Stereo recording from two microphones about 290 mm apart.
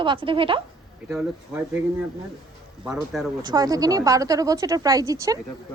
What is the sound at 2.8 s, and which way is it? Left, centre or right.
Speech, centre.